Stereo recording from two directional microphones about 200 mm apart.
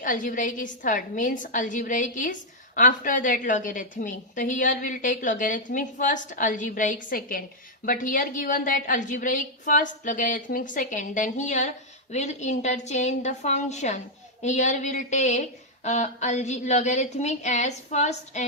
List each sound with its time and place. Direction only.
0.0 s a woman's voice: 40° left (ahead or behind)